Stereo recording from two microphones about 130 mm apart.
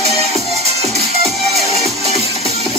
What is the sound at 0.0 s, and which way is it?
Music, 55° right (ahead or behind).